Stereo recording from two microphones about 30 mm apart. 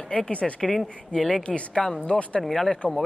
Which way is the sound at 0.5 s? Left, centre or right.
Centre.